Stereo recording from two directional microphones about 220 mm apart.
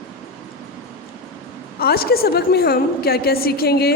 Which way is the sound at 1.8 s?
45° left (ahead or behind).